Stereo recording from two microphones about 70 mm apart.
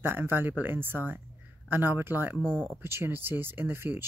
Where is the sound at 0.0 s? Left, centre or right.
Right.